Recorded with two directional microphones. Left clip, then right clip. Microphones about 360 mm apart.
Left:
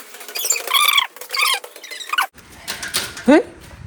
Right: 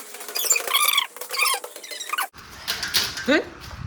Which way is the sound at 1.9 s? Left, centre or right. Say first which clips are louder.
Left 7 dB; centre.